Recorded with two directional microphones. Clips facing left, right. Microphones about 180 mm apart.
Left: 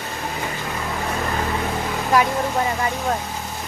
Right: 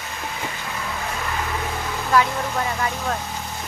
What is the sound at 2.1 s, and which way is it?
Speech, 20° left (ahead or behind).